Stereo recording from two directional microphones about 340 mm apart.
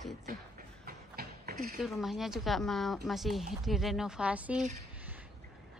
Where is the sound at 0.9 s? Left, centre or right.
Right.